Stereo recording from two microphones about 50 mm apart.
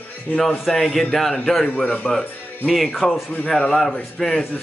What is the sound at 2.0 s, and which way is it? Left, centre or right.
Speech, centre.